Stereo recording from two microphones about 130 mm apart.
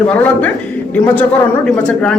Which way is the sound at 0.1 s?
10° left (ahead or behind).